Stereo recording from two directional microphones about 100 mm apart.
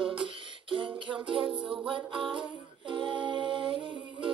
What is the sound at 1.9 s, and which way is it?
Music, 55° right (ahead or behind).